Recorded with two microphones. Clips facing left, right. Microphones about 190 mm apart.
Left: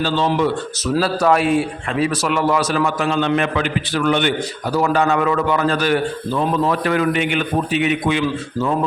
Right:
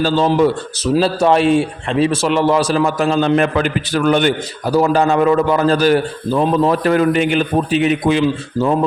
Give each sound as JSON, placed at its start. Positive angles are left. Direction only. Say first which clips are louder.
{"t": 0.0, "sound": "a man's voice", "louder": "right 4 dB", "side_deg": -40}
{"t": 0.9, "sound": "a man's voice", "louder": "right 3 dB", "side_deg": -25}